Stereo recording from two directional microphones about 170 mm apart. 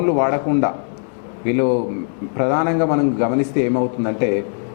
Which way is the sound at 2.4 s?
15° left (ahead or behind).